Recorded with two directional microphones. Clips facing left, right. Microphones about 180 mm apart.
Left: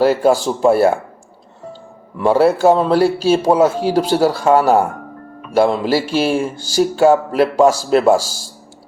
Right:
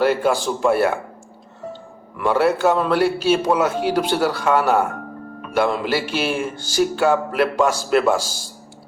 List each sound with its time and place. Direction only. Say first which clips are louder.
0.0 s speech: left 5 dB; 35° left (ahead or behind)
2.1 s speech: left 5 dB; 30° left (ahead or behind)